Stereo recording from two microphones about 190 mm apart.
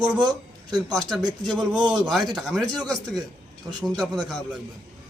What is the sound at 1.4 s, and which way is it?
Speech, centre (ahead or behind).